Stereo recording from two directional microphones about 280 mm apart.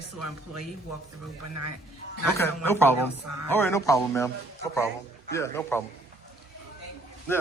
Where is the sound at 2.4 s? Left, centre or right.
Centre.